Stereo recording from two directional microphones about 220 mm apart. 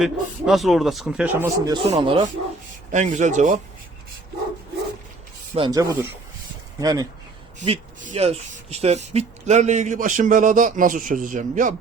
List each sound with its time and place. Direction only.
0.0 s speech: centre (ahead or behind); by 3.6 s 35° right (ahead or behind)
5.5 s speech: 20° right (ahead or behind)
7.7 s speech: 30° right (ahead or behind)